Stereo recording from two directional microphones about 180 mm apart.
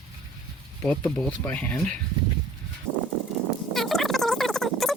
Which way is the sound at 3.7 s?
Centre (ahead or behind).